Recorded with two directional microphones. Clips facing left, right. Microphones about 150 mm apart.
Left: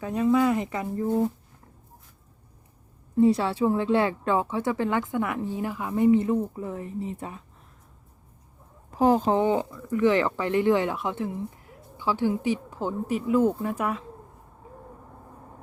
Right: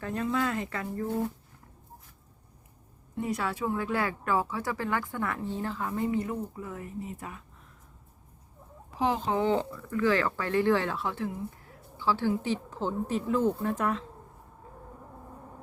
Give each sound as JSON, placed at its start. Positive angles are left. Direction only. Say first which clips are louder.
{"t": 0.0, "sound": "speech", "louder": "left 7 dB", "side_deg": 15}
{"t": 3.2, "sound": "speech", "louder": "left 10 dB", "side_deg": 30}
{"t": 9.0, "sound": "speech", "louder": "left 7 dB", "side_deg": 45}
{"t": 9.4, "sound": "speech", "louder": "left 3 dB", "side_deg": 15}